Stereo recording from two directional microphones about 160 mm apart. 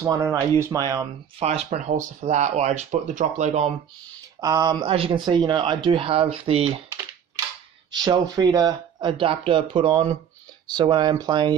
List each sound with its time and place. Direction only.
0.0 s speech: 20° right (ahead or behind)
1.7 s speech: 50° right (ahead or behind)
4.4 s speech: 25° right (ahead or behind)
7.9 s speech: 25° right (ahead or behind)